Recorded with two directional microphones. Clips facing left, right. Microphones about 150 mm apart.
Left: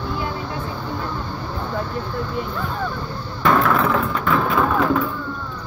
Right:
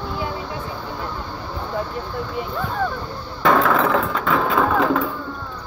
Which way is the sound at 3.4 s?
90° right.